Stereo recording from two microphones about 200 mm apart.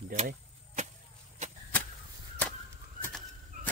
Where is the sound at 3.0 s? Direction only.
10° left (ahead or behind).